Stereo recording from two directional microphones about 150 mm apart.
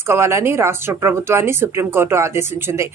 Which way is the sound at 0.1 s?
15° right (ahead or behind).